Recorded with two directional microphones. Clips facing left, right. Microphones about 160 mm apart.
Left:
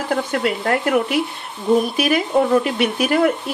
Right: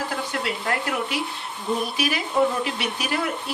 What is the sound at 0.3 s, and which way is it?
Speech, 55° left (ahead or behind).